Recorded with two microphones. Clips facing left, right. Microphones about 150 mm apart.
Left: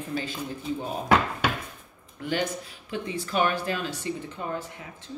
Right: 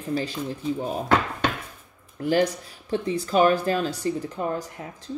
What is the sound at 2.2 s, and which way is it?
Speech, 40° right (ahead or behind).